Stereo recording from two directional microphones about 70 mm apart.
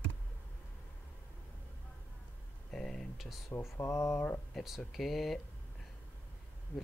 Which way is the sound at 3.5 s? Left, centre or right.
Left.